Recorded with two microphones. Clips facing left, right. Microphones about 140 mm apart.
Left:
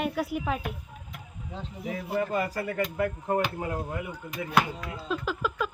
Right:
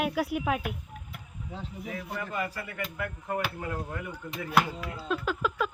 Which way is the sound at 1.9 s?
30° left (ahead or behind).